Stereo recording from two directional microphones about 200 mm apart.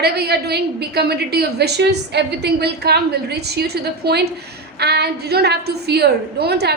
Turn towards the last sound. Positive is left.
turn(degrees=-55)  # may be behind; listen again after turning